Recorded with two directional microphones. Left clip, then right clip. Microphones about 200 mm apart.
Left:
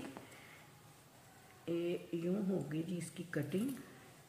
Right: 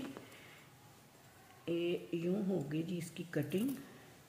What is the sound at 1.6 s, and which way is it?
Speech, 20° right (ahead or behind).